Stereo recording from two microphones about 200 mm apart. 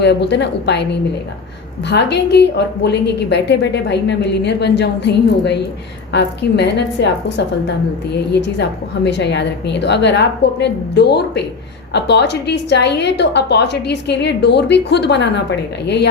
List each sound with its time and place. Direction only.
0.0 s a woman's voice: 60° left (ahead or behind)
1.9 s a woman's voice: 60° left (ahead or behind)